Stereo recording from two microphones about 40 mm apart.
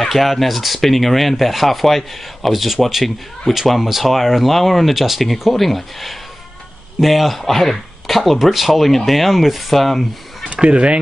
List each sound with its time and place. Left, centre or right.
0.0 s speech: centre
10.5 s speech: right